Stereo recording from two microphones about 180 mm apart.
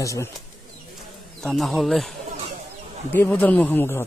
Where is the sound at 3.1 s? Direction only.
10° left (ahead or behind).